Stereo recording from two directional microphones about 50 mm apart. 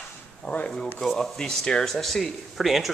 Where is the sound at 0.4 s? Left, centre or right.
Left.